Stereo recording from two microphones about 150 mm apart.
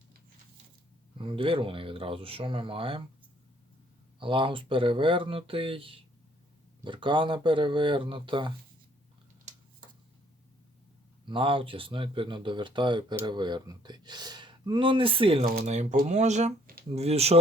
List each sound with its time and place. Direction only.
1.2 s speech: 35° right (ahead or behind)
4.2 s speech: 35° right (ahead or behind)
11.3 s speech: 35° right (ahead or behind)
15.6 s speech: 50° right (ahead or behind)